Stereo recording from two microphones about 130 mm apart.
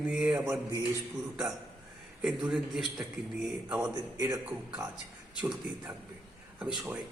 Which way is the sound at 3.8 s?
25° right (ahead or behind).